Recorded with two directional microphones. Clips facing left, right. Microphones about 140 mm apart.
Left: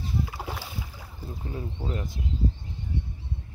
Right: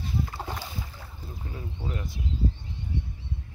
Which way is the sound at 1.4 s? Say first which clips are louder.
Left 5 dB; 30° left (ahead or behind).